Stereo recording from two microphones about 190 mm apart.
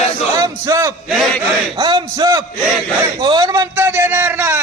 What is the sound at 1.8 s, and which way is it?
Speech, 20° right (ahead or behind).